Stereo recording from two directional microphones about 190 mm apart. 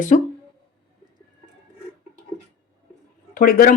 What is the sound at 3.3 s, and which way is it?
Speech, 50° left (ahead or behind).